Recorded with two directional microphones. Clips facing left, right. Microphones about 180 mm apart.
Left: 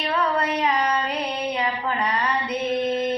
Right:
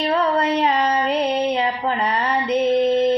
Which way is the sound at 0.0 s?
30° right (ahead or behind).